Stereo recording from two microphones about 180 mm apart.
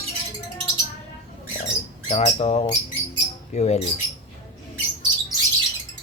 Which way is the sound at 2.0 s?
40° left (ahead or behind).